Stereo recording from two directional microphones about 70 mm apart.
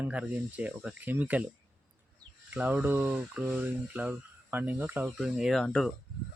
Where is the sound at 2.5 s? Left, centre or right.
Right.